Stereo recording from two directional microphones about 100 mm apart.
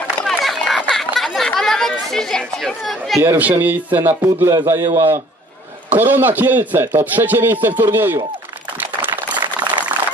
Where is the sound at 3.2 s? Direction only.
20° right (ahead or behind).